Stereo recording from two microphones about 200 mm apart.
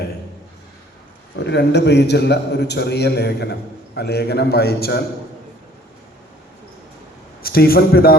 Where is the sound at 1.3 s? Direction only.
60° left (ahead or behind).